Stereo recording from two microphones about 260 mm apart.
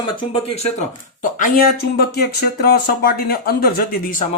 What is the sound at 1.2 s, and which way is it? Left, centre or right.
Speech, left.